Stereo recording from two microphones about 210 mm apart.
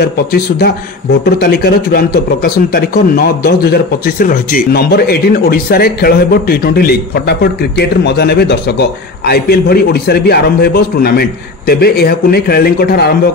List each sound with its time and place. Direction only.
0.0 s speech: 50° left (ahead or behind)